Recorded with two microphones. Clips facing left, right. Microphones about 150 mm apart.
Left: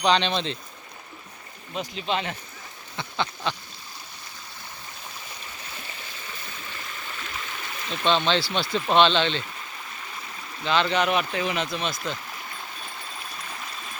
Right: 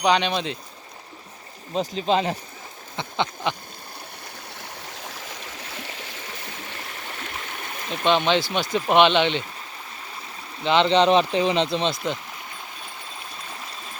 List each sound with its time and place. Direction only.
0.0 s speech: 10° right (ahead or behind)
1.7 s speech: 35° right (ahead or behind)
2.9 s a sound: 20° right (ahead or behind)
4.6 s stream: 85° right; by 7.9 s 50° right (ahead or behind)
8.0 s speech: 15° right (ahead or behind)
10.6 s speech: 20° right (ahead or behind)